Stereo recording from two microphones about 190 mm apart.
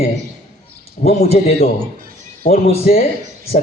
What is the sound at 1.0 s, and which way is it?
A man's voice, 35° left (ahead or behind).